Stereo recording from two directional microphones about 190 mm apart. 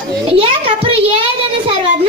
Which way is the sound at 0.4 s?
30° right (ahead or behind).